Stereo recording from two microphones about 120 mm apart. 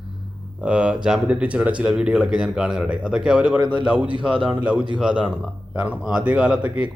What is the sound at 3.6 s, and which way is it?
Speech, 40° right (ahead or behind).